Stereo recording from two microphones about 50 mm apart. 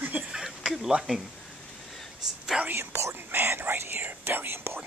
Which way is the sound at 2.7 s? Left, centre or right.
Right.